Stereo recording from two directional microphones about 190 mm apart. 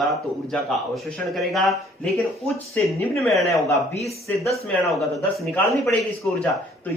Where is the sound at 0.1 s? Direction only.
Centre (ahead or behind).